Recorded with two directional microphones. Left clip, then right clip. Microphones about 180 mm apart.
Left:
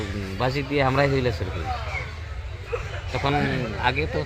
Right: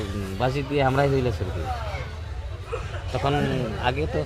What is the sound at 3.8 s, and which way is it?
Speech, 25° right (ahead or behind).